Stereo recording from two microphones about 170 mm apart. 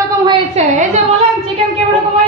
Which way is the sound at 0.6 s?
40° right (ahead or behind).